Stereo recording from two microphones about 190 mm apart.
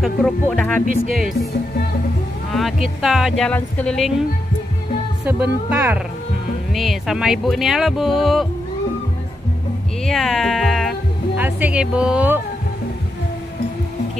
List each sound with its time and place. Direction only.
0.0 s speech: 5° left (ahead or behind)
0.8 s speech: 45° right (ahead or behind)
3.0 s speech: centre (ahead or behind)
5.2 s speech: 5° right (ahead or behind)
10.0 s speech: centre (ahead or behind)